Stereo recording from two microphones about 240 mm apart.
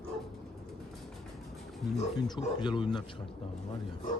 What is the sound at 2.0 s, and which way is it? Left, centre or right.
Speech, centre.